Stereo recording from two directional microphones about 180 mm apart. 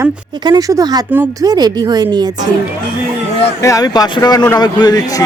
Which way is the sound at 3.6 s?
20° left (ahead or behind).